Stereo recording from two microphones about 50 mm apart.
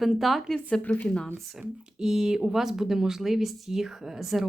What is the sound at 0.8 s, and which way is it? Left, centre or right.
Speech, left.